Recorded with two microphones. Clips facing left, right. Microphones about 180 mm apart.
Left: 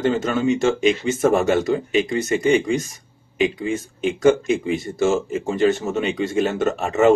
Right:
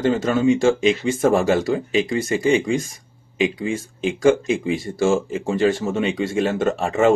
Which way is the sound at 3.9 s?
25° right (ahead or behind).